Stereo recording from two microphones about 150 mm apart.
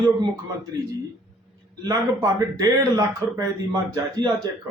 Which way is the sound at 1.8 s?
25° right (ahead or behind).